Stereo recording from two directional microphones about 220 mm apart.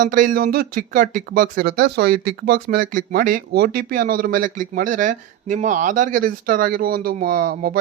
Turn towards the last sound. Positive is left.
turn(degrees=-40)  # may be behind; listen again after turning